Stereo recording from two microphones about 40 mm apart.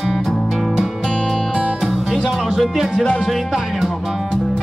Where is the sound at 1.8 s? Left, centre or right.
Centre.